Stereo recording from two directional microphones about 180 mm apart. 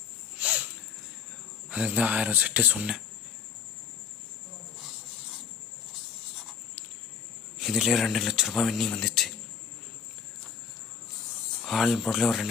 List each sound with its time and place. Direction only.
0.3 s a sound: 10° right (ahead or behind)
1.7 s speech: 5° right (ahead or behind)
7.6 s speech: 5° right (ahead or behind)
11.6 s speech: centre (ahead or behind)